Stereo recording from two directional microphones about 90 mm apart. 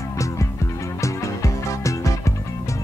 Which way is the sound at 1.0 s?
35° left (ahead or behind).